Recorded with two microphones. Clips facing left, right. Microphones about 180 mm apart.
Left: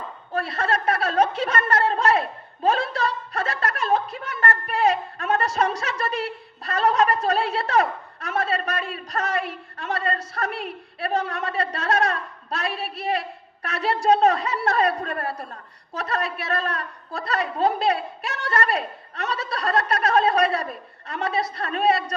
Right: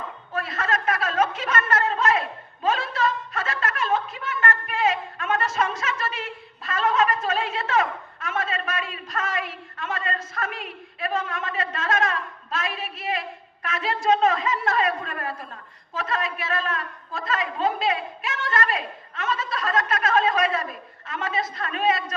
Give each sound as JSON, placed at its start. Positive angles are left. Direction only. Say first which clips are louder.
{"t": 0.3, "sound": "a woman's voice", "louder": "left 3 dB", "side_deg": 30}